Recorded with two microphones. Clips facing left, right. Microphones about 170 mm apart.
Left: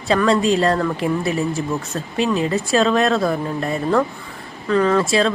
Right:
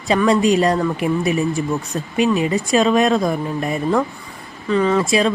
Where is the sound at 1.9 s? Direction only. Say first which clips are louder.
Right 3 dB; 10° right (ahead or behind).